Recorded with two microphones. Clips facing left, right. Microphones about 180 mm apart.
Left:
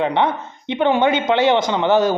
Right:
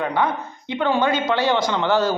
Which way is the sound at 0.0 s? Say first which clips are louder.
Left 3 dB; 25° left (ahead or behind).